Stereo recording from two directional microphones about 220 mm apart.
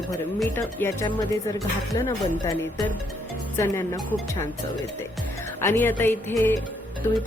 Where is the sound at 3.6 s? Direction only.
10° left (ahead or behind).